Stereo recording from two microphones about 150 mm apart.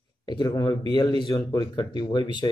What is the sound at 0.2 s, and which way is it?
Speech, 25° left (ahead or behind).